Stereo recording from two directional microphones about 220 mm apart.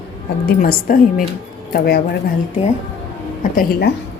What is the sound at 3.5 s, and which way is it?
Speech, 40° left (ahead or behind).